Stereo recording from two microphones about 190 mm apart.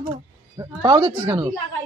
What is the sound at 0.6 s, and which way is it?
Speech, 20° right (ahead or behind).